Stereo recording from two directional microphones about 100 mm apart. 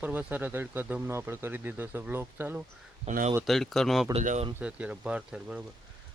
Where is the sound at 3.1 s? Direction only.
90° right.